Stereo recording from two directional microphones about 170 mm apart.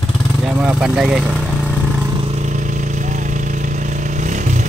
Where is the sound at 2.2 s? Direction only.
40° right (ahead or behind).